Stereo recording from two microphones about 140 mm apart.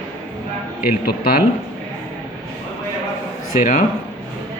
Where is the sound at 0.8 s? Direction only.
90° left.